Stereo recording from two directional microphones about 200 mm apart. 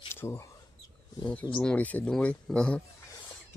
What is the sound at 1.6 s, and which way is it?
Speech, 5° left (ahead or behind).